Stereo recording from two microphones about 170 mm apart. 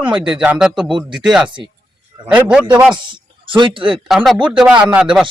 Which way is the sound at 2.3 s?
5° right (ahead or behind).